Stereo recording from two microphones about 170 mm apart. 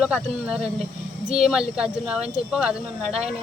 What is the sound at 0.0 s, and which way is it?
Speech, 5° right (ahead or behind).